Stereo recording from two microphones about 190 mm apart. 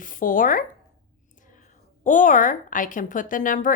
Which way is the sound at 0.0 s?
45° left (ahead or behind).